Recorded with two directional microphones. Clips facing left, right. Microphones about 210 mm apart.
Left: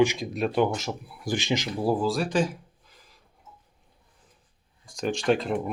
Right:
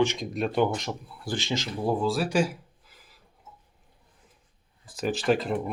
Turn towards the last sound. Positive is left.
turn(degrees=0)  # may be behind; listen again after turning